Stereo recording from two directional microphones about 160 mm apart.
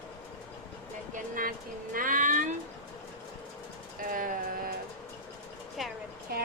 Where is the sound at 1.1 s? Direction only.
60° right (ahead or behind).